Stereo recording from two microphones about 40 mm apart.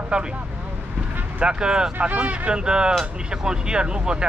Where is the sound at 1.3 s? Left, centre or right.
Right.